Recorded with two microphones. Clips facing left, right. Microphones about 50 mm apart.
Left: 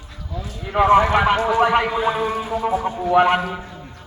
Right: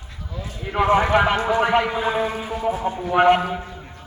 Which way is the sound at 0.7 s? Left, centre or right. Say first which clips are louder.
Left 3 dB; centre.